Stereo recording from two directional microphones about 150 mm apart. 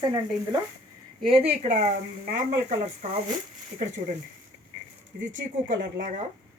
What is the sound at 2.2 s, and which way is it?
Speech, 65° right (ahead or behind).